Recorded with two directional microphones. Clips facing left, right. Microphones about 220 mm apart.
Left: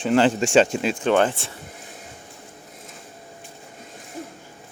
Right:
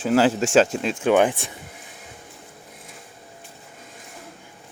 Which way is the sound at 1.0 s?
15° right (ahead or behind).